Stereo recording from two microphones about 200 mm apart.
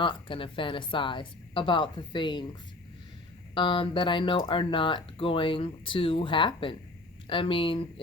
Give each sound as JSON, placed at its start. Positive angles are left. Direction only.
{"t": 0.0, "sound": "speech", "side_deg": 25}
{"t": 3.5, "sound": "speech", "side_deg": 25}